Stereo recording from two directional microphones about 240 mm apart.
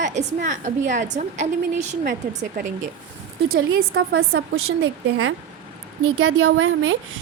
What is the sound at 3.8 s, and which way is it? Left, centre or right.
Speech, right.